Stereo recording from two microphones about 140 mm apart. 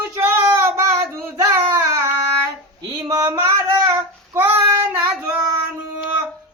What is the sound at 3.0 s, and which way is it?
Female singing, 25° right (ahead or behind).